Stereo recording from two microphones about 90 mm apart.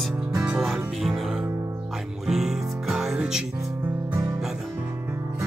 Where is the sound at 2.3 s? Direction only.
5° right (ahead or behind).